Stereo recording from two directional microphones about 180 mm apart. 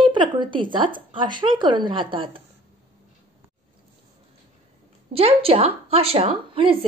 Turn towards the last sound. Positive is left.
turn(degrees=-30)  # may be behind; listen again after turning